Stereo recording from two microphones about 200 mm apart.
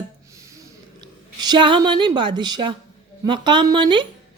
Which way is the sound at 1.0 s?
20° right (ahead or behind).